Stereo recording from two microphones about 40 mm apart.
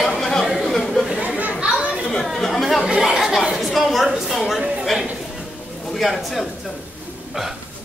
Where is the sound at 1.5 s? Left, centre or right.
Right.